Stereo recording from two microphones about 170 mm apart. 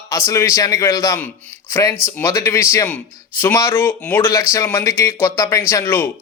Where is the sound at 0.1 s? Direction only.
20° left (ahead or behind).